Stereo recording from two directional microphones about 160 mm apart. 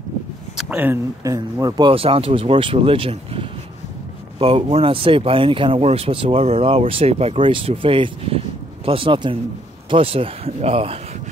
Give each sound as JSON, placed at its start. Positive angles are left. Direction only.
{"t": 0.6, "sound": "speech", "side_deg": -10}
{"t": 1.2, "sound": "speech", "side_deg": -20}
{"t": 1.9, "sound": "speech", "side_deg": -35}